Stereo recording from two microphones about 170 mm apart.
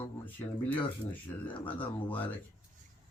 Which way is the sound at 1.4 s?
10° left (ahead or behind).